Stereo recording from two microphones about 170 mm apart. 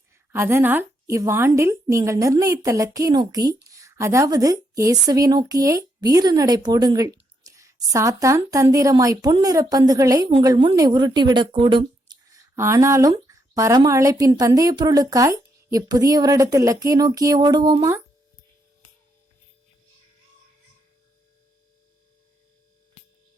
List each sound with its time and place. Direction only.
0.3 s a woman's voice: 15° right (ahead or behind)